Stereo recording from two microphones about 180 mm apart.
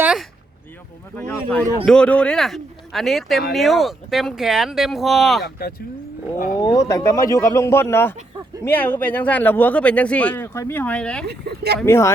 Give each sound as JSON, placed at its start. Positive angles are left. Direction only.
{"t": 0.0, "sound": "a sound", "side_deg": -5}
{"t": 1.1, "sound": "speech", "side_deg": 10}
{"t": 6.6, "sound": "speech", "side_deg": 20}
{"t": 11.3, "sound": "speech", "side_deg": -65}
{"t": 11.9, "sound": "speech", "side_deg": 15}